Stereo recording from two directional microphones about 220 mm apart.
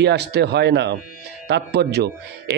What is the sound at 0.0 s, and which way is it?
A man's voice, 50° right (ahead or behind).